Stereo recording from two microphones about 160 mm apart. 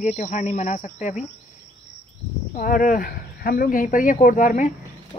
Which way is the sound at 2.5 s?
60° left (ahead or behind).